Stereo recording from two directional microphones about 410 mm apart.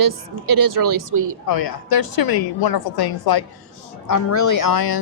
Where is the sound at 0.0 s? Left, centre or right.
Right.